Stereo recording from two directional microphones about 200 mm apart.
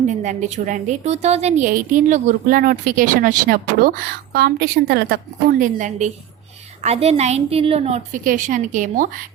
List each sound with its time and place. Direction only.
0.1 s a woman's voice: 35° right (ahead or behind)